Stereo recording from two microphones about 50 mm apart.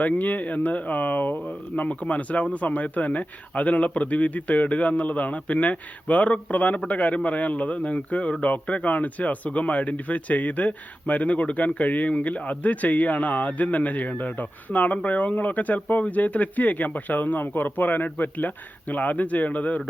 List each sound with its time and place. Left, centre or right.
0.0 s a man's voice: left